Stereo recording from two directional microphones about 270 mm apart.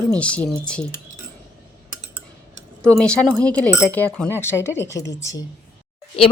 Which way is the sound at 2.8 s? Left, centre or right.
Centre.